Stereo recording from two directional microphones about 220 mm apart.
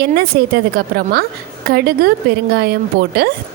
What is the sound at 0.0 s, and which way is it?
A woman's voice, 45° right (ahead or behind).